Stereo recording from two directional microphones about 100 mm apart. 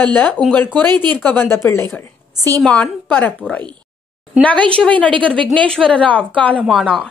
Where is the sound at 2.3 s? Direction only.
35° right (ahead or behind).